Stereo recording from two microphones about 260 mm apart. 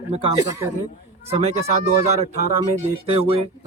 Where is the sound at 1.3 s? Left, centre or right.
Right.